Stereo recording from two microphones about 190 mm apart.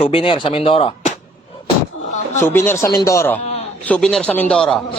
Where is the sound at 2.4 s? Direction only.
10° left (ahead or behind).